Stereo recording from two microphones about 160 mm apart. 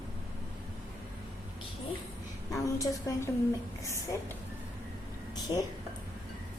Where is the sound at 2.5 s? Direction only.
20° left (ahead or behind).